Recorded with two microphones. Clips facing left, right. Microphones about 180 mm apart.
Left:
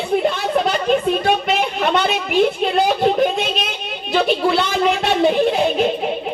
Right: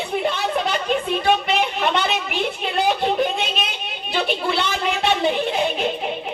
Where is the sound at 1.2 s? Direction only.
45° left (ahead or behind).